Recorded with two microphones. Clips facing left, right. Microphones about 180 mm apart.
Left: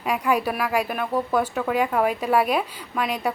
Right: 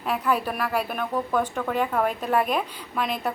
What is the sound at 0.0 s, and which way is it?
A woman's voice, 10° left (ahead or behind).